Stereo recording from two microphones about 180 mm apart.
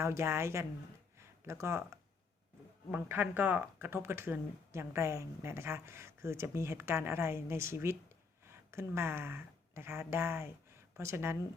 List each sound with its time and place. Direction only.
0.0 s speech: 15° right (ahead or behind)